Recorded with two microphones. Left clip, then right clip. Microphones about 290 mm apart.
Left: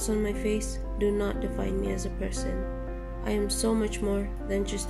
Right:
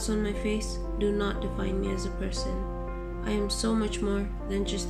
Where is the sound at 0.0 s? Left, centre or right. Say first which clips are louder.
Left 2 dB; left.